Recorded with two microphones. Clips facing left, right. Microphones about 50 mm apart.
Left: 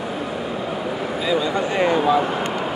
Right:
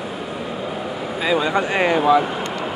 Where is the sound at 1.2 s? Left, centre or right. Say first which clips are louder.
Right 3 dB; right.